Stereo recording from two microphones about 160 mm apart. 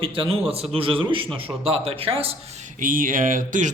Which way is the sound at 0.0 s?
35° right (ahead or behind).